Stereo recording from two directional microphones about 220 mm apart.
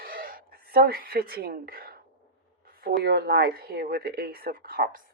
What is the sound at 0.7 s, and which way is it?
A woman's voice, 40° right (ahead or behind).